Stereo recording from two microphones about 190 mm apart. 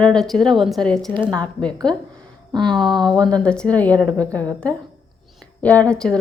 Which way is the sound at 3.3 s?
5° left (ahead or behind).